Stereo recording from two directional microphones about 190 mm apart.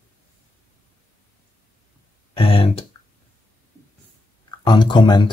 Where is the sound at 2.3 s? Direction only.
30° left (ahead or behind).